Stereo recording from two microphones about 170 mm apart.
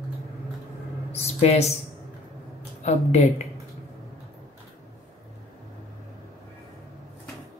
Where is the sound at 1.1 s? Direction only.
40° left (ahead or behind).